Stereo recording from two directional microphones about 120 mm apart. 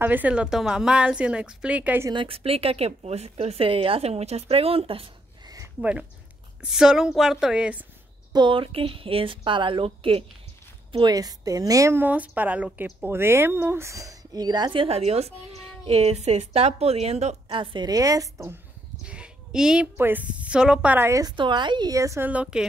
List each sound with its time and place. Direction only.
0.0 s a woman's voice: 15° right (ahead or behind)
2.1 s speech: 50° right (ahead or behind)
5.8 s a woman's voice: 10° right (ahead or behind)
8.3 s speech: 40° right (ahead or behind)
10.9 s a woman's voice: 40° right (ahead or behind); by 17.4 s 65° right (ahead or behind)
17.5 s a woman's voice: 40° right (ahead or behind); by 18.6 s 25° right (ahead or behind)
19.0 s a sound: 10° right (ahead or behind)
20.0 s a woman's voice: 15° right (ahead or behind)
21.1 s a woman's voice: 30° right (ahead or behind)
22.2 s a woman's voice: 10° right (ahead or behind)